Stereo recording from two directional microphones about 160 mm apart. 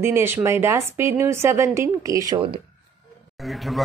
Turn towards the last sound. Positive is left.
turn(degrees=0)  # may be behind; listen again after turning